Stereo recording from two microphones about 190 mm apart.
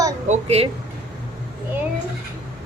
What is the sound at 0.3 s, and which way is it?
Speech, 35° right (ahead or behind).